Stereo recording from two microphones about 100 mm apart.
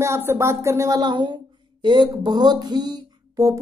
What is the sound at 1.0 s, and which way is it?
A woman's voice, 50° right (ahead or behind).